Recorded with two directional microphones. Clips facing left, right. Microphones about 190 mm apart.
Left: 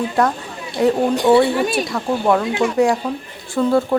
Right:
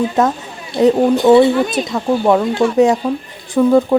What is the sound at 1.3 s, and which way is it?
Speech, 5° right (ahead or behind).